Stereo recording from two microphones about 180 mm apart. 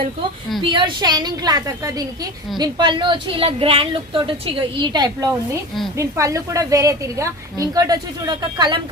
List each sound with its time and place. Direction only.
0.6 s a woman's voice: 25° right (ahead or behind)